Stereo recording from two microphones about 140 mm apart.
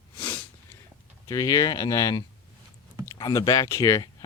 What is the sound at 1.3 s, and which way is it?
Speech, 25° left (ahead or behind).